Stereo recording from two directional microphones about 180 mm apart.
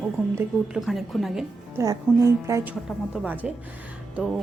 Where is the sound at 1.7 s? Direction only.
15° right (ahead or behind).